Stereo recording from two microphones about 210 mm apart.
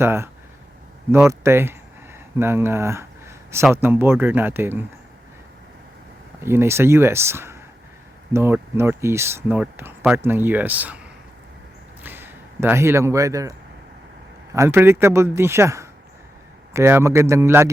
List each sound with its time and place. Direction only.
0.0 s speech: 10° right (ahead or behind)
1.3 s speech: 10° right (ahead or behind)
2.1 s a sound: 10° right (ahead or behind)
3.8 s speech: 10° right (ahead or behind)
6.4 s speech: 10° right (ahead or behind)
12.0 s a man's voice: 10° right (ahead or behind)
14.5 s speech: 15° right (ahead or behind)